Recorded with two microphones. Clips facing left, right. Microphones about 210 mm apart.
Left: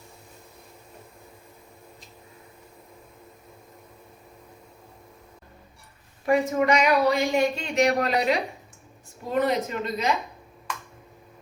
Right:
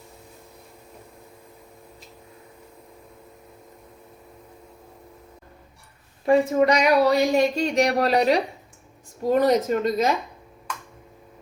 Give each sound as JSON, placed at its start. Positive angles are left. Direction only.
{"t": 6.2, "sound": "a woman's voice", "side_deg": -30}